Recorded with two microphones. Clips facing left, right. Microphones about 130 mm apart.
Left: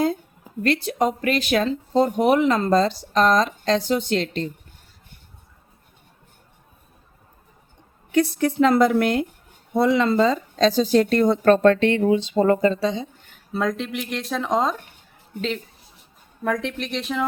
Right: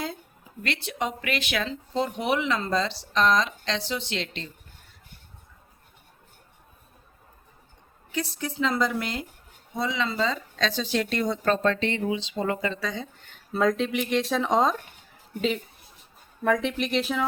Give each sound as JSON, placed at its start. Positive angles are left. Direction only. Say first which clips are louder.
{"t": 0.6, "sound": "speech", "louder": "left 9 dB", "side_deg": 40}
{"t": 8.1, "sound": "a woman's voice", "louder": "left 11 dB", "side_deg": 60}
{"t": 12.8, "sound": "speech", "louder": "left 8 dB", "side_deg": 25}
{"t": 13.5, "sound": "speech", "louder": "right 1 dB", "side_deg": 0}